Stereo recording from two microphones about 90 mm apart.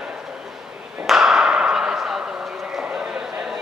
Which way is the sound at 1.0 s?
5° right (ahead or behind).